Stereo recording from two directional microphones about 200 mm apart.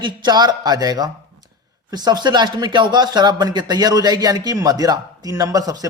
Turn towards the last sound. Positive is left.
turn(degrees=-20)  # may be behind; listen again after turning